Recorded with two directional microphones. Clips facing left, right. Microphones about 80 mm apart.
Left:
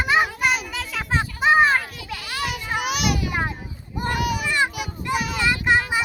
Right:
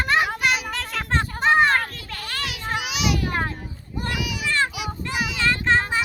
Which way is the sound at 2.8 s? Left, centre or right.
Left.